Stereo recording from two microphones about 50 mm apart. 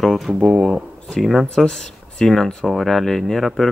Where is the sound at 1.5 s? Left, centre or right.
Centre.